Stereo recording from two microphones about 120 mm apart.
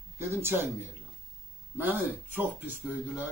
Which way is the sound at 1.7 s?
15° right (ahead or behind).